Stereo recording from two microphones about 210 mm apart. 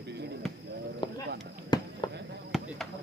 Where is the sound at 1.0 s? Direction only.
20° left (ahead or behind).